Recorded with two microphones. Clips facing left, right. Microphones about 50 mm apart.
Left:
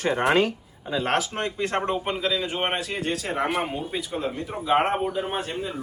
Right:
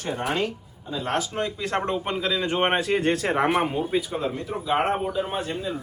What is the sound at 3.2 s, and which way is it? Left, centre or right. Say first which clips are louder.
Speech: right 4 dB; right.